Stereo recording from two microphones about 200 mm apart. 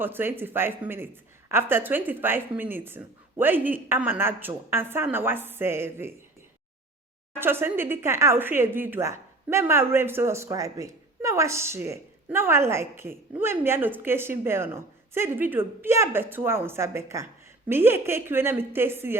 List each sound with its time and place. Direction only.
0.0 s speech: 10° right (ahead or behind)
7.3 s speech: 10° right (ahead or behind)